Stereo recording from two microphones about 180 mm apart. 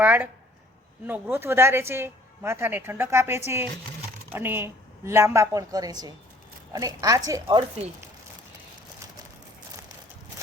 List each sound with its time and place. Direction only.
0.0 s speech: 10° right (ahead or behind); by 7.9 s 25° right (ahead or behind)